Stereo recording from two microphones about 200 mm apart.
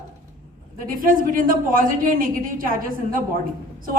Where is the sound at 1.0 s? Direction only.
45° right (ahead or behind).